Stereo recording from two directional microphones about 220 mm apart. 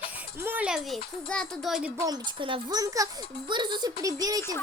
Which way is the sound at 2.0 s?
20° right (ahead or behind).